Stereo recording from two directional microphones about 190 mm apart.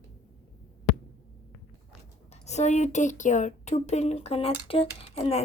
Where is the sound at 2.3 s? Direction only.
35° left (ahead or behind).